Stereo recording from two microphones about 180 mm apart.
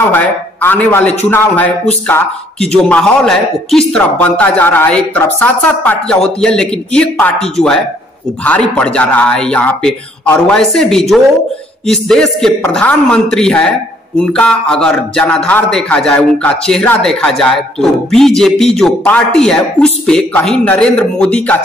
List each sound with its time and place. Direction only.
0.1 s a man's voice: 10° left (ahead or behind)